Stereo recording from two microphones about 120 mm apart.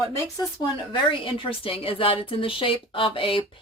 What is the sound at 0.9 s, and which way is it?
A woman's voice, 45° left (ahead or behind).